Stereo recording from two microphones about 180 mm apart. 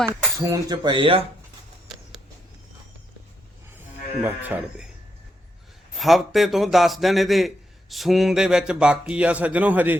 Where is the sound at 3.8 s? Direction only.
10° right (ahead or behind).